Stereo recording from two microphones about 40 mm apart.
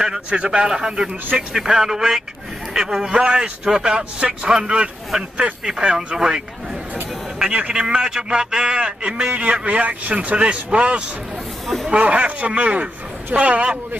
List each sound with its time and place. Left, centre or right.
0.5 s speech: centre
3.1 s a man's voice: right
11.6 s snake: centre
11.9 s a man's voice: right